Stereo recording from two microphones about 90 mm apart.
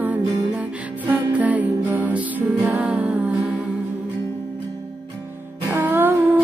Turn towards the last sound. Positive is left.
turn(degrees=-25)  # may be behind; listen again after turning